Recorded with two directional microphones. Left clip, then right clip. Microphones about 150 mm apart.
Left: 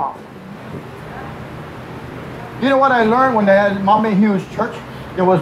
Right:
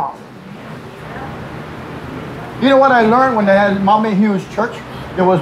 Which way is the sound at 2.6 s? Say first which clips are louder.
Right 3 dB; 15° right (ahead or behind).